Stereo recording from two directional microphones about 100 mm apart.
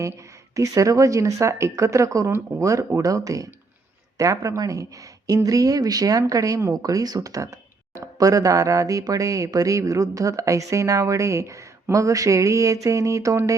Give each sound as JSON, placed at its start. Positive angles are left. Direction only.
{"t": 0.0, "sound": "a woman's voice", "side_deg": -35}